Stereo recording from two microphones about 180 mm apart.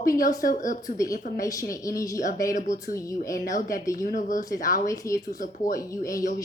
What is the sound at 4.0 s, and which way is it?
Speech, 50° left (ahead or behind).